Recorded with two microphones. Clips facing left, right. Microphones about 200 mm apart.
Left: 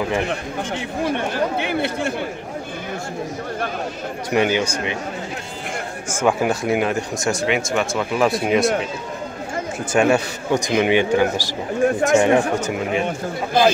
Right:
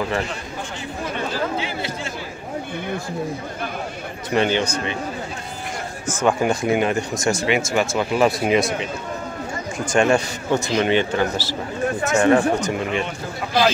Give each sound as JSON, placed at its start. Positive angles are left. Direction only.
{"t": 1.1, "sound": "speech", "side_deg": 60}
{"t": 4.3, "sound": "speech", "side_deg": 10}
{"t": 6.1, "sound": "speech", "side_deg": 5}
{"t": 9.9, "sound": "speech", "side_deg": 5}